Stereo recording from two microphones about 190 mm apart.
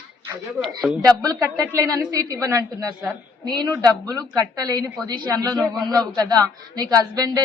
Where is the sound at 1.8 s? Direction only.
15° right (ahead or behind).